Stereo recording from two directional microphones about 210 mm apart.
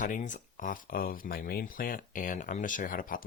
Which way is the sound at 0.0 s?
35° left (ahead or behind).